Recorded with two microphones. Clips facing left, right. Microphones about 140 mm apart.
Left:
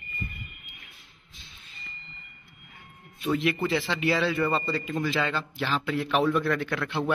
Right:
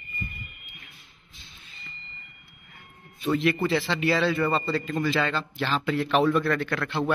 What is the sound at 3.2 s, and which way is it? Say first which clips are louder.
Speech: right 2 dB; 10° left (ahead or behind).